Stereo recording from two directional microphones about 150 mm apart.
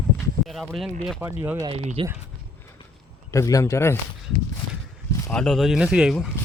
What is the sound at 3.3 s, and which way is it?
Speech, 20° left (ahead or behind).